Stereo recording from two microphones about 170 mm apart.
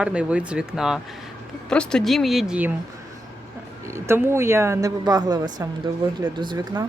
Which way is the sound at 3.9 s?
15° right (ahead or behind).